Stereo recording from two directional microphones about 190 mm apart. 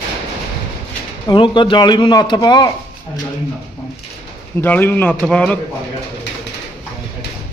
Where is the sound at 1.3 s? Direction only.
25° left (ahead or behind).